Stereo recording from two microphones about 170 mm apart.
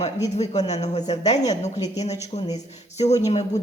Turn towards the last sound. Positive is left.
turn(degrees=40)  # may be behind; listen again after turning